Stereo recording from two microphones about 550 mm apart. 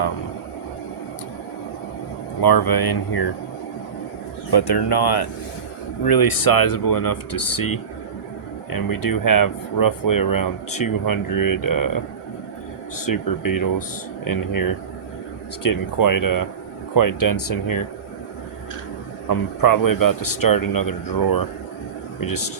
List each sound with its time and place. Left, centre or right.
2.4 s speech: left
4.5 s speech: left
13.1 s speech: left
15.6 s speech: left
19.6 s speech: left